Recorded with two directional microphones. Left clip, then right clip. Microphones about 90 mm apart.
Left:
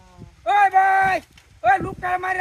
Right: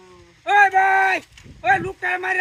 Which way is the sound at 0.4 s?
35° left (ahead or behind).